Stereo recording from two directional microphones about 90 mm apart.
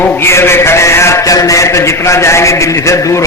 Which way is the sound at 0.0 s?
25° left (ahead or behind).